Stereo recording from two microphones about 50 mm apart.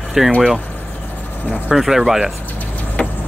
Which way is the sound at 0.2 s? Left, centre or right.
Centre.